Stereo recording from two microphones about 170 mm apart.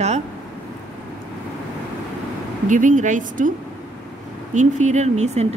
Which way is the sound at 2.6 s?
50° right (ahead or behind).